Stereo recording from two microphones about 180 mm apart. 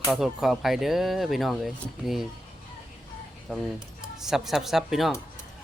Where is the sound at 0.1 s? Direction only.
Centre (ahead or behind).